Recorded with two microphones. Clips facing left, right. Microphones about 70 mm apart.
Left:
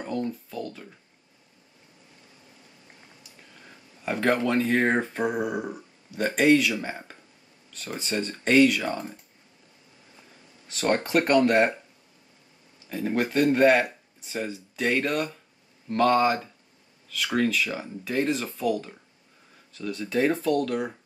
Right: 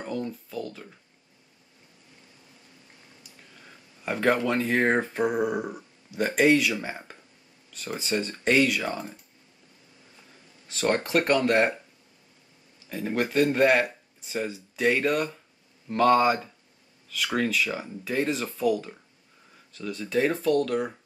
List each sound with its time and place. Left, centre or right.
0.0 s speech: centre
3.6 s speech: centre
5.2 s speech: centre
10.7 s speech: centre
12.9 s speech: centre